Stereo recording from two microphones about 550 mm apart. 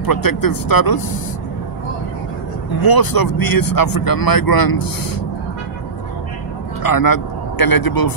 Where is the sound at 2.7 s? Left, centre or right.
Left.